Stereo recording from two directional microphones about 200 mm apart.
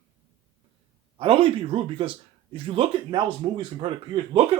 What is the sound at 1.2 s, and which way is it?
Speech, 25° right (ahead or behind).